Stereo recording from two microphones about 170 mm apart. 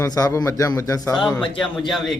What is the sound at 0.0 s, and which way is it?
A man's voice, 20° left (ahead or behind).